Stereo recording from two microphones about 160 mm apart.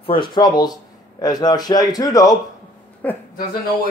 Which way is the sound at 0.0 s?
30° left (ahead or behind).